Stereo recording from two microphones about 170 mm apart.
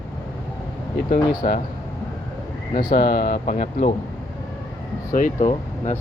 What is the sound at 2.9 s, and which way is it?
Speech, 65° left (ahead or behind).